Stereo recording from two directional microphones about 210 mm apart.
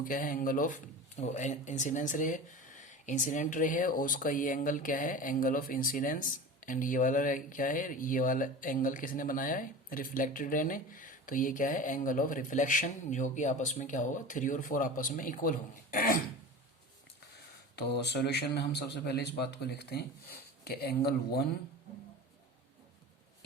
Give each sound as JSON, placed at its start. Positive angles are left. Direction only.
{"t": 0.0, "sound": "speech", "side_deg": 40}
{"t": 17.7, "sound": "a man's voice", "side_deg": 50}